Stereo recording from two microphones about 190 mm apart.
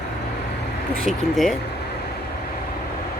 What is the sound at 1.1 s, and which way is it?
Speech, centre (ahead or behind).